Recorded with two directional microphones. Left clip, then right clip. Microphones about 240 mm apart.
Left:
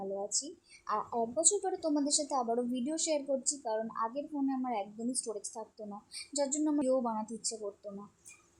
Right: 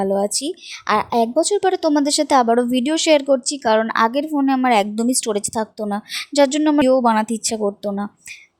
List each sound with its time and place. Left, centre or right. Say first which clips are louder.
0.0 s speech: right 18 dB; right